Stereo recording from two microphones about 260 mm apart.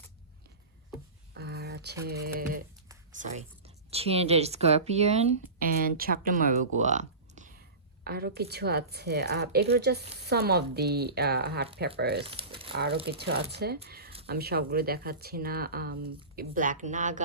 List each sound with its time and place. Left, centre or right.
1.3 s a sound: right
2.0 s speech: right
3.9 s speech: right
12.2 s crumpling: right
12.7 s speech: right